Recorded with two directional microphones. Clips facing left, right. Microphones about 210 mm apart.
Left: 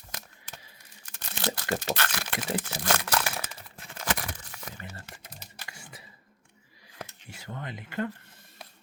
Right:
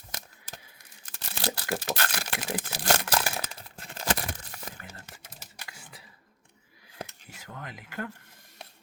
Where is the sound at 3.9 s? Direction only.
35° right (ahead or behind).